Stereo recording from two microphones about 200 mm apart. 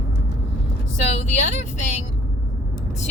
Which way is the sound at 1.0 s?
35° left (ahead or behind).